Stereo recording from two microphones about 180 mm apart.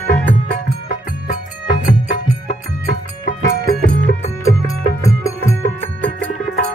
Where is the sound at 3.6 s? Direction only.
55° right (ahead or behind).